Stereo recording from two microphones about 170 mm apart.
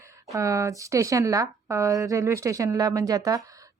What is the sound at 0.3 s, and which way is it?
Speech, 20° right (ahead or behind).